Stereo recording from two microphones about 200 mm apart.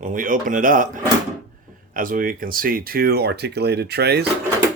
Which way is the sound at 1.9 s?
45° right (ahead or behind).